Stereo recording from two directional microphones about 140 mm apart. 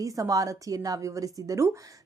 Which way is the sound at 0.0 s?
25° right (ahead or behind).